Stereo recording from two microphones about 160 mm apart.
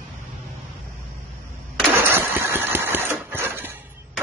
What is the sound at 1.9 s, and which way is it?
Engine, 15° right (ahead or behind).